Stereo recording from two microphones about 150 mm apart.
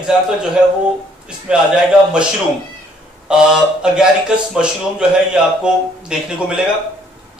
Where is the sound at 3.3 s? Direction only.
5° right (ahead or behind).